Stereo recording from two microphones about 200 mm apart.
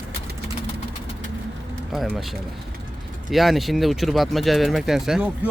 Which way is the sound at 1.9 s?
Centre (ahead or behind).